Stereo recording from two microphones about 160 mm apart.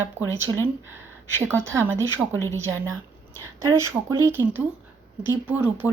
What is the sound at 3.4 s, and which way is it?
A woman's voice, 20° right (ahead or behind).